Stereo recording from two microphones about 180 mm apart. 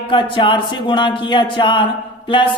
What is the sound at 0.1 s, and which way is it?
A woman's voice, 25° left (ahead or behind).